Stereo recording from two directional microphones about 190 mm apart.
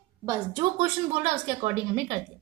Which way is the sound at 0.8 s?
30° right (ahead or behind).